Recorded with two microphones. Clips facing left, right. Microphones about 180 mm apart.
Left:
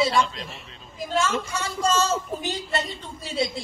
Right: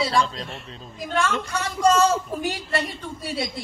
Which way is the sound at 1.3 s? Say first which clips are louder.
Even; centre (ahead or behind).